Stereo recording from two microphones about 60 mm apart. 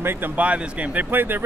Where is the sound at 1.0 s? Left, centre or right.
Right.